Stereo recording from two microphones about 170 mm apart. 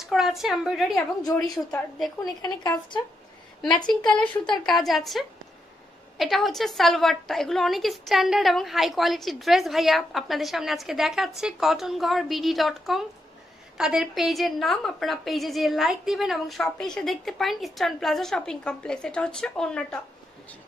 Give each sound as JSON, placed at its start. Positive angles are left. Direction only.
{"t": 0.1, "sound": "a woman's voice", "side_deg": 0}
{"t": 0.9, "sound": "speech", "side_deg": 20}
{"t": 1.7, "sound": "a woman's voice", "side_deg": 0}
{"t": 2.2, "sound": "speech", "side_deg": 25}
{"t": 3.9, "sound": "a woman's voice", "side_deg": 5}